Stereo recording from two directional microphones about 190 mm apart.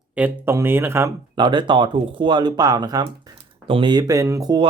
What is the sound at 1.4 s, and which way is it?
Speech, 25° right (ahead or behind).